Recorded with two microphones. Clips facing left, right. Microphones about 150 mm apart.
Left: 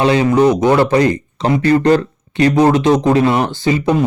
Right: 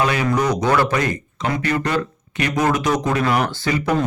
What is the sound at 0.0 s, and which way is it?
Speech, 25° left (ahead or behind).